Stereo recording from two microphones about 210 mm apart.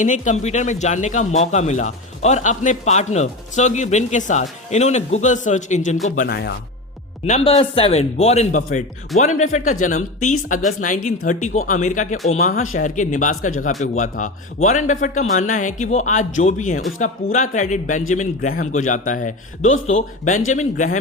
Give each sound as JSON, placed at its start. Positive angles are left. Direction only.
{"t": 0.0, "sound": "speech", "side_deg": 35}
{"t": 7.3, "sound": "speech", "side_deg": 30}